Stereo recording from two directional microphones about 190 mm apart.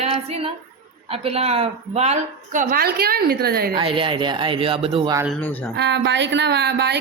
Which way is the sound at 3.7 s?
25° right (ahead or behind).